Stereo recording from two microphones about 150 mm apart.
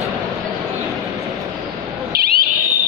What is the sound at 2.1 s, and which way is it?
Owl, 90° right.